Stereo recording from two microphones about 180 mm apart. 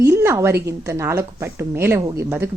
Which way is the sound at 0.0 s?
15° right (ahead or behind).